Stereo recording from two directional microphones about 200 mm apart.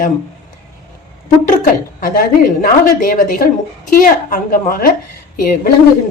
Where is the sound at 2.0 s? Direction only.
45° left (ahead or behind).